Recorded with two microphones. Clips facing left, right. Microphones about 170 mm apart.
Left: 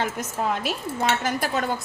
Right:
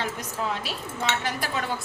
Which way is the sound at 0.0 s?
50° left (ahead or behind).